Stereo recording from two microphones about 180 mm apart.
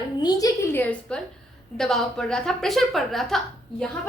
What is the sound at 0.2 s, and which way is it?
A woman's voice, 20° left (ahead or behind).